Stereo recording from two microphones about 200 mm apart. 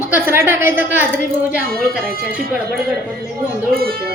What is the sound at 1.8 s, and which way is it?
Speech, 50° right (ahead or behind).